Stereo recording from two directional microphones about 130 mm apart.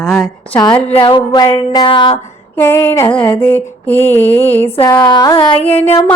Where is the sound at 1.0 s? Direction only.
30° left (ahead or behind).